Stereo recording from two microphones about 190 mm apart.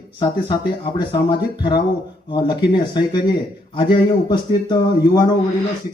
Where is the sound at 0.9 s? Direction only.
25° left (ahead or behind).